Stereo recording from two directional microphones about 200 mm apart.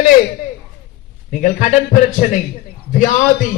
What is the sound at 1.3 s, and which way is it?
A man's voice, 40° left (ahead or behind).